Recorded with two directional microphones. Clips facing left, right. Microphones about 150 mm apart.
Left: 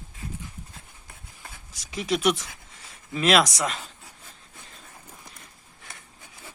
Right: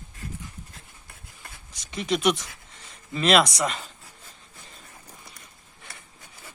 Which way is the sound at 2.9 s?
5° left (ahead or behind).